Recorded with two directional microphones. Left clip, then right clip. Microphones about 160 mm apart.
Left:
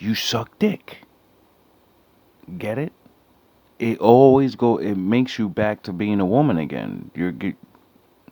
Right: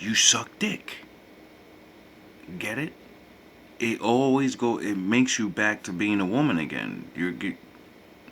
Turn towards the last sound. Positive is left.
turn(degrees=65)  # may be behind; listen again after turning